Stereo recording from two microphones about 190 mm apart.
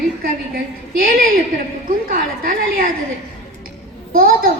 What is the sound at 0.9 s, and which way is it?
A woman's voice, 50° right (ahead or behind).